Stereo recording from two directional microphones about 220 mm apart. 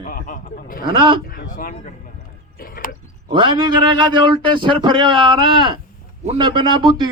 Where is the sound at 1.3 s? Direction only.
40° left (ahead or behind).